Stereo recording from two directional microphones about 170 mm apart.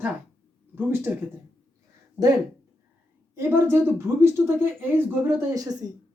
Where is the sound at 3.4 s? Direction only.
15° right (ahead or behind).